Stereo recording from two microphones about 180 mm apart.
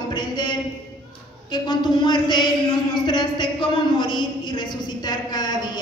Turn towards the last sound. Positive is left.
turn(degrees=25)  # may be behind; listen again after turning